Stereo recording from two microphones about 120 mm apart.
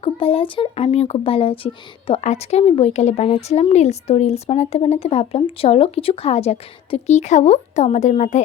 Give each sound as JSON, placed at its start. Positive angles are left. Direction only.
{"t": 0.0, "sound": "speech", "side_deg": 50}
{"t": 2.2, "sound": "speech", "side_deg": 60}